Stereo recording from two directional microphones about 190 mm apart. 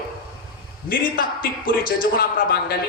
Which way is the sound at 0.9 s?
50° left (ahead or behind).